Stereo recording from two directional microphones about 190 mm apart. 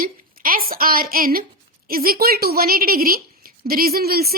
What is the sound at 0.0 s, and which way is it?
A woman's voice, 50° right (ahead or behind).